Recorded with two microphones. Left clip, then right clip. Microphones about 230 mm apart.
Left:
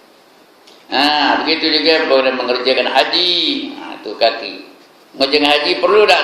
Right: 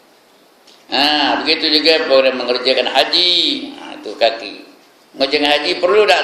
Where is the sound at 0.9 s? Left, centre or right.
Right.